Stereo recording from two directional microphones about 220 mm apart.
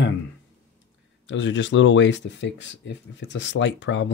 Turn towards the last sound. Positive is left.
turn(degrees=55)  # may be behind; listen again after turning